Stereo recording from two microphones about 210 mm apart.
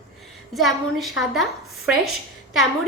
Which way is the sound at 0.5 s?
Centre (ahead or behind).